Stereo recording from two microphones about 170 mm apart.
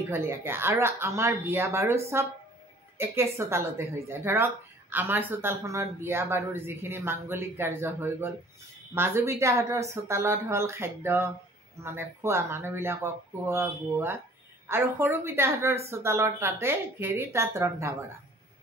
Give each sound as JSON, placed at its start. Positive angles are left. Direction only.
{"t": 0.1, "sound": "speech", "side_deg": -15}